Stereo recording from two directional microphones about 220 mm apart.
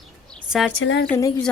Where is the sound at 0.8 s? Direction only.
60° left (ahead or behind).